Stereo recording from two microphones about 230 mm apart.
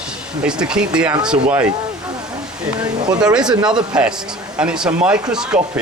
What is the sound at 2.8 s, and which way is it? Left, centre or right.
Speech, centre.